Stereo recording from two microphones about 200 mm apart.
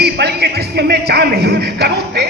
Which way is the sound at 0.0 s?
55° right (ahead or behind).